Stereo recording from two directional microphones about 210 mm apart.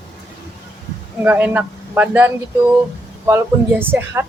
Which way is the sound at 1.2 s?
10° right (ahead or behind).